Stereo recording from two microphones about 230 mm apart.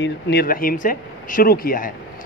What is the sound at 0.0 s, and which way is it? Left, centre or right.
A man's voice, left.